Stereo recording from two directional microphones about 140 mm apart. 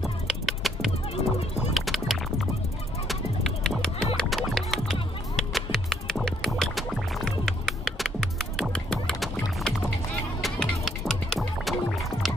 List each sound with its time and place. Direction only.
0.0 s music: centre (ahead or behind)